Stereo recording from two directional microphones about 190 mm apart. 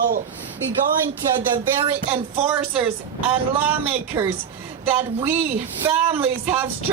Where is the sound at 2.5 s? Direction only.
5° right (ahead or behind).